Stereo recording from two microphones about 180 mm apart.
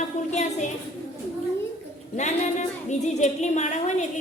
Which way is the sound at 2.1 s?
40° left (ahead or behind).